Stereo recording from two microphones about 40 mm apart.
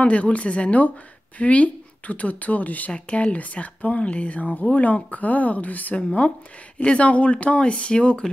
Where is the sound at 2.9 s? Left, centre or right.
Left.